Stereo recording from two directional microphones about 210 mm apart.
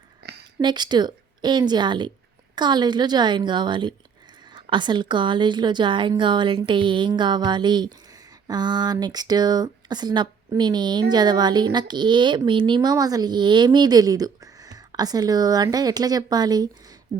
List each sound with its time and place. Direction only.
0.2 s a sound: 50° right (ahead or behind)
0.6 s speech: 20° right (ahead or behind)
17.1 s speech: 40° right (ahead or behind)